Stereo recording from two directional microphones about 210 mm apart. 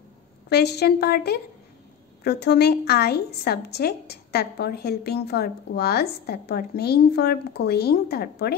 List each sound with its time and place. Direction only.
0.5 s a woman's voice: 50° left (ahead or behind)